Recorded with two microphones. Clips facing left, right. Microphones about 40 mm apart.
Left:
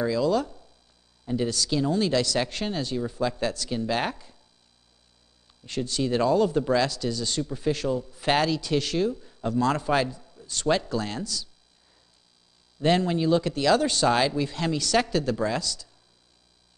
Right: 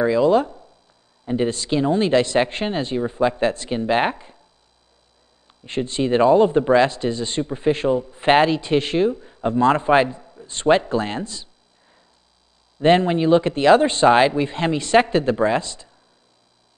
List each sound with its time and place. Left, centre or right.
0.0 s speech: right
5.5 s speech: right
12.7 s speech: right